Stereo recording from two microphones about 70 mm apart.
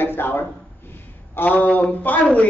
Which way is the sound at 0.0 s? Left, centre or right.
Left.